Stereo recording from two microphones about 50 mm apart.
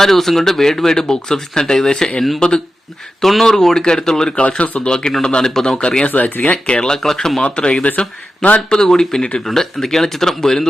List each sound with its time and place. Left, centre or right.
0.0 s speech: centre
3.2 s speech: centre
4.4 s speech: left
6.1 s speech: left
6.7 s speech: centre
7.4 s speech: centre
8.7 s speech: centre